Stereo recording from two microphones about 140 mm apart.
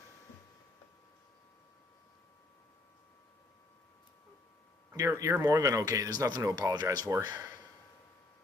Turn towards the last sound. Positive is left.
turn(degrees=-25)  # may be behind; listen again after turning